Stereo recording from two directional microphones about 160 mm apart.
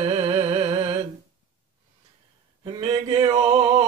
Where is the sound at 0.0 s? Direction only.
45° right (ahead or behind).